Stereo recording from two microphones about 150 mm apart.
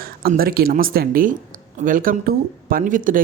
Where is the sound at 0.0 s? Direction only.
80° right.